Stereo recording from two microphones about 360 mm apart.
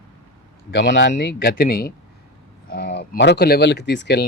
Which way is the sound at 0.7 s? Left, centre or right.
Left.